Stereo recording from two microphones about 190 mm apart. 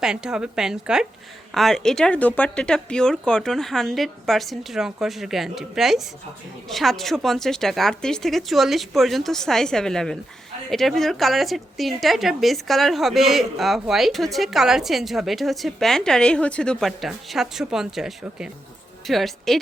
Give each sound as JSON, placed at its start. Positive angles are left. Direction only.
{"t": 0.0, "sound": "a woman's voice", "side_deg": -5}